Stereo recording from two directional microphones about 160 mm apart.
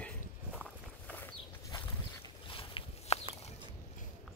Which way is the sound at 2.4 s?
35° left (ahead or behind).